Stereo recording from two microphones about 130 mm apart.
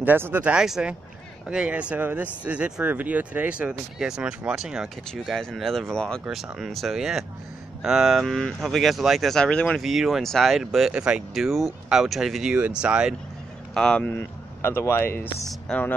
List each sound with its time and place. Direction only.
0.0 s speech: 15° right (ahead or behind); by 9.8 s 5° left (ahead or behind)
9.8 s speech: 5° right (ahead or behind)
13.7 s speech: 5° left (ahead or behind)
14.1 s speech: 20° left (ahead or behind)
15.7 s speech: 5° left (ahead or behind)